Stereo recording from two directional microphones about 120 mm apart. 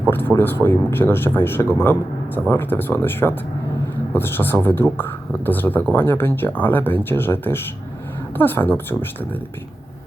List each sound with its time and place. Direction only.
0.1 s speech: 15° left (ahead or behind)